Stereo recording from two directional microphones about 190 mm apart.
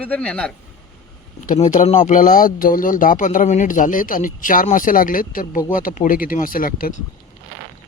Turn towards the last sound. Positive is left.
turn(degrees=45)  # may be behind; listen again after turning